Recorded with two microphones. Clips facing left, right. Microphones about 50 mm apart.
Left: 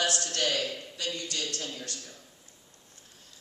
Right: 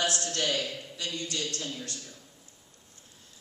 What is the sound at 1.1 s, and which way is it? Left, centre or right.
Speech, right.